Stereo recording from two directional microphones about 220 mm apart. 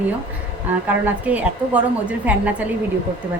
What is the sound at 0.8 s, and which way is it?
A woman's voice, 10° right (ahead or behind).